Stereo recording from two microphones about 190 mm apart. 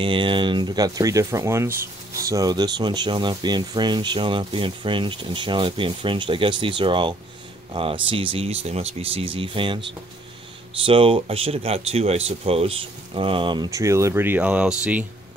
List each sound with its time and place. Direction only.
0.0 s speech: 25° right (ahead or behind)
10.9 s speech: 30° right (ahead or behind); by 15.0 s 5° right (ahead or behind)